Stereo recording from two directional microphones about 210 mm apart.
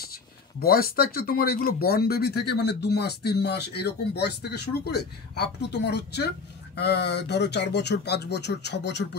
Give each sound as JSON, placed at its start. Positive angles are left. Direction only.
{"t": 0.6, "sound": "speech", "side_deg": 45}